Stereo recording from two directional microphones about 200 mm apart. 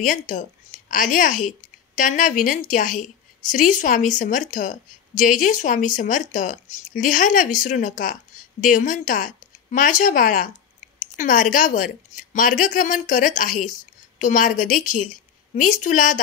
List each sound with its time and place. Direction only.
0.0 s speech: 40° left (ahead or behind)